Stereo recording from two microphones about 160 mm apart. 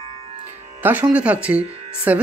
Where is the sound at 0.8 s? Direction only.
10° right (ahead or behind).